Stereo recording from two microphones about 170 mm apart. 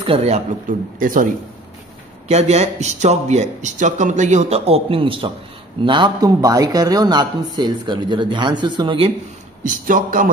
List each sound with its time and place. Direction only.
0.0 s speech: 35° right (ahead or behind); by 1.3 s 50° right (ahead or behind)
2.2 s a man's voice: 40° right (ahead or behind)
9.6 s speech: 50° right (ahead or behind)